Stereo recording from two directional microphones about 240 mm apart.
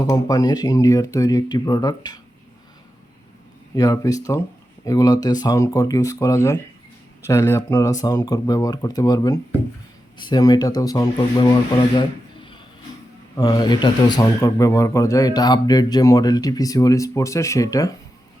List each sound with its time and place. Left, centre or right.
0.0 s speech: centre
3.8 s speech: centre